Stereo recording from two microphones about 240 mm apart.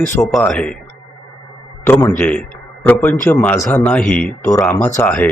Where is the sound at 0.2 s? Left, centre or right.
Centre.